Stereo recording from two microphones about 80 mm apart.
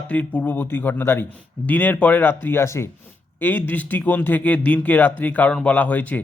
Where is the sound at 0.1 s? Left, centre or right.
Centre.